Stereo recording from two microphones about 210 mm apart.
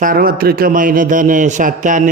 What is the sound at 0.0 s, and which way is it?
A man's voice, 45° right (ahead or behind).